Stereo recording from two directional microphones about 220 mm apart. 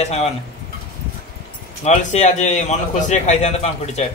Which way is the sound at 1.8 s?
35° left (ahead or behind).